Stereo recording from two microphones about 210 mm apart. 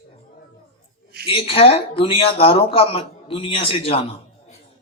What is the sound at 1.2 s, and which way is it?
Speech, 25° left (ahead or behind).